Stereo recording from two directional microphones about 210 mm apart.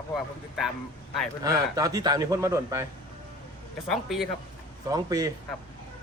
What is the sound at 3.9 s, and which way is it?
Speech, centre (ahead or behind).